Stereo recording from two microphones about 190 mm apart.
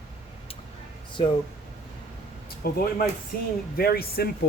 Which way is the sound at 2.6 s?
50° left (ahead or behind).